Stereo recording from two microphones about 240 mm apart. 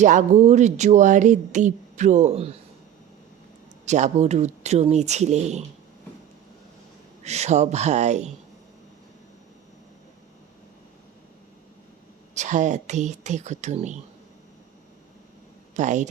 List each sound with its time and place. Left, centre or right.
0.0 s speech: right
3.8 s speech: right
7.3 s speech: right
12.3 s speech: right
15.7 s speech: right